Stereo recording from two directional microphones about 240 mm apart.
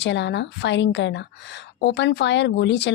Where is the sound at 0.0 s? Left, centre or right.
Left.